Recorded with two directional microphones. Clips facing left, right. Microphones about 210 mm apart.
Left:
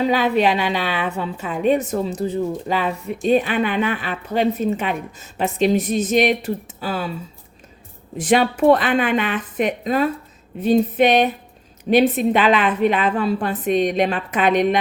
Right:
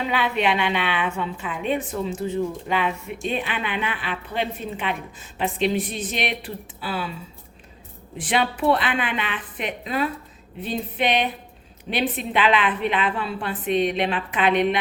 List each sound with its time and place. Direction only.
0.1 s a woman's voice: 40° left (ahead or behind)
8.2 s a woman's voice: 45° left (ahead or behind)